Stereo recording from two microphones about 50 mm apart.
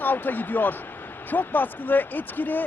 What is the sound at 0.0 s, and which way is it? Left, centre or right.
Speech, left.